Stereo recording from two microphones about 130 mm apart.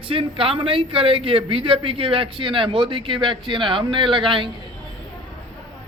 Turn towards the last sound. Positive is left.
turn(degrees=-40)  # may be behind; listen again after turning